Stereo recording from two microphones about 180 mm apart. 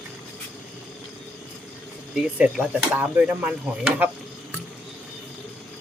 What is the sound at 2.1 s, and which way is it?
Speech, 5° right (ahead or behind).